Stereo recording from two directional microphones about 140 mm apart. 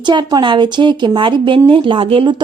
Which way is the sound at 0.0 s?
35° right (ahead or behind).